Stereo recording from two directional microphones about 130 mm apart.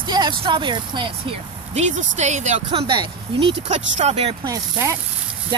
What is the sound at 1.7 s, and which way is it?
Speech, 65° right (ahead or behind).